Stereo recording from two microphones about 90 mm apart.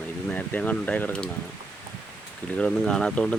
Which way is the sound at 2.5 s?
10° left (ahead or behind).